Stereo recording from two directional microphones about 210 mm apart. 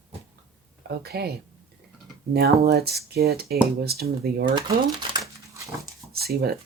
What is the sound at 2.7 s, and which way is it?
Speech, 50° right (ahead or behind).